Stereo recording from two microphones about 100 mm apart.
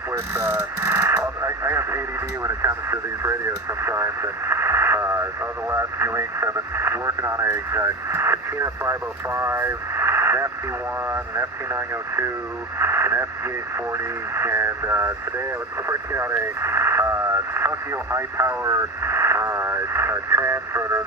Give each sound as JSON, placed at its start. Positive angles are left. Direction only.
{"t": 0.1, "sound": "radio", "side_deg": -30}
{"t": 2.4, "sound": "speech", "side_deg": -30}